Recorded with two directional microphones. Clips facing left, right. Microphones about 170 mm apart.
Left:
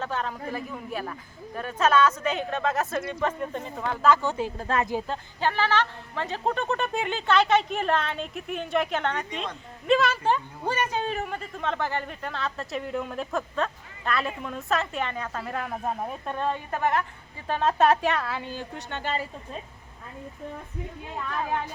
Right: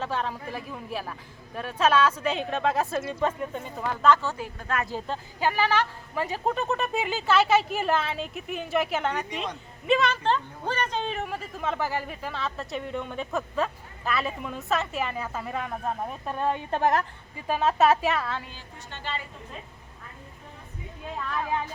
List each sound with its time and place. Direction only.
0.0 s a woman's voice: 5° right (ahead or behind)
4.1 s speech: 15° left (ahead or behind)
5.0 s a woman's voice: centre (ahead or behind)
5.5 s a woman's voice: 10° right (ahead or behind); by 16.3 s 5° left (ahead or behind)
16.7 s a woman's voice: 40° right (ahead or behind)
17.4 s a woman's voice: 5° right (ahead or behind)
18.7 s speech: 55° left (ahead or behind)